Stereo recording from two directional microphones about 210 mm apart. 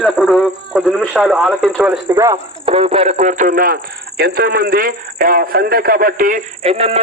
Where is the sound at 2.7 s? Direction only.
25° right (ahead or behind).